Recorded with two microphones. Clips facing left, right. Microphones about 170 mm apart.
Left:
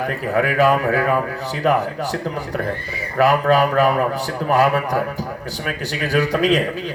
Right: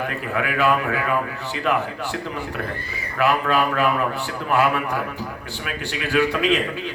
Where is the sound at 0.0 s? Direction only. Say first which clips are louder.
Left 5 dB; 40° left (ahead or behind).